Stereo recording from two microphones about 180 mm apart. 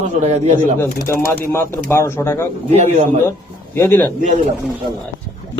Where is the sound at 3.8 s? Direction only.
10° left (ahead or behind).